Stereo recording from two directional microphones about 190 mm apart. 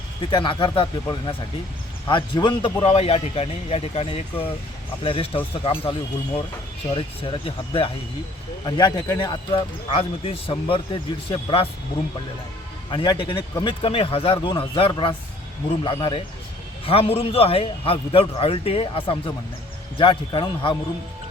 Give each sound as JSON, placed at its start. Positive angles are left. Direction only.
{"t": 0.2, "sound": "a man's voice", "side_deg": 25}
{"t": 12.9, "sound": "a man's voice", "side_deg": 25}